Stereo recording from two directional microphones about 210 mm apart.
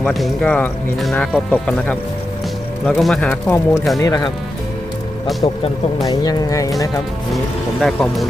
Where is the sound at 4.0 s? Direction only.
15° left (ahead or behind).